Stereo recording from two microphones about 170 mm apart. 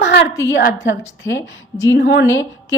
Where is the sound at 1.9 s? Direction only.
85° left.